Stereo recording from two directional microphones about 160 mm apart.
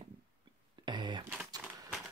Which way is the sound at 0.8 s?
30° right (ahead or behind).